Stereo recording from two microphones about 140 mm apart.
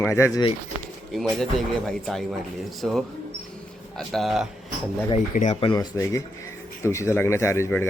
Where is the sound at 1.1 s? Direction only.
5° left (ahead or behind).